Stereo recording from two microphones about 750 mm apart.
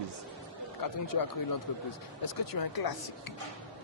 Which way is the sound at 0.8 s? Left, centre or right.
Left.